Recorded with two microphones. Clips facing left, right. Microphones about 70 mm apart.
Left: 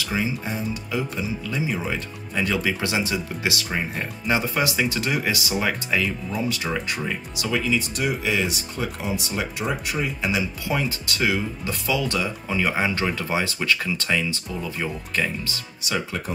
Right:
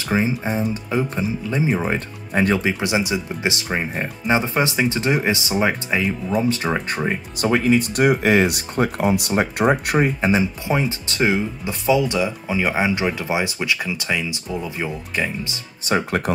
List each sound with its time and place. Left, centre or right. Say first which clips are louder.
0.0 s speech: right 5 dB; right
2.6 s speech: right 3 dB; right
10.2 s speech: right 6 dB; right
15.8 s speech: right 7 dB; right